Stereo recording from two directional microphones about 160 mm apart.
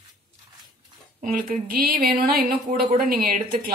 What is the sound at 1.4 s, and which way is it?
A woman's voice, 65° right (ahead or behind).